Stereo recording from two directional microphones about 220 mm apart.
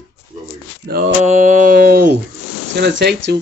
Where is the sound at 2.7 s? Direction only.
50° right (ahead or behind).